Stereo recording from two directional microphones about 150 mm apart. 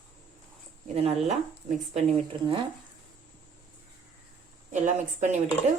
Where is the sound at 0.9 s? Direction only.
40° right (ahead or behind).